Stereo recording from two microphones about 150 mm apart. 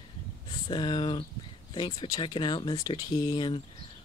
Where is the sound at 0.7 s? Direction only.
30° left (ahead or behind).